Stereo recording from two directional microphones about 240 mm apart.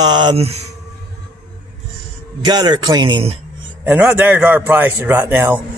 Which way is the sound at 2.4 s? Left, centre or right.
Centre.